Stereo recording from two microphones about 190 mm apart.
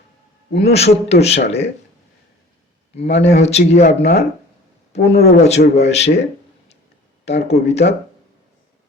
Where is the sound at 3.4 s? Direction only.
35° left (ahead or behind).